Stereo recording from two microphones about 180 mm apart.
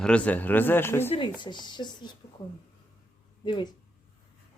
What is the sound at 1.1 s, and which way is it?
Speech, 25° left (ahead or behind).